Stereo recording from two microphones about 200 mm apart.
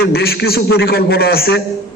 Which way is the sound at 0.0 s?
50° left (ahead or behind).